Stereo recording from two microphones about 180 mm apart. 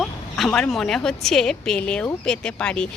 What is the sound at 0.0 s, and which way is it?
A woman's voice, centre (ahead or behind).